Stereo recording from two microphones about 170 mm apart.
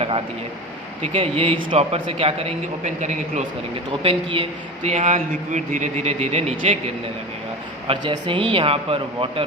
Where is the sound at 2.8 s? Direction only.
45° right (ahead or behind).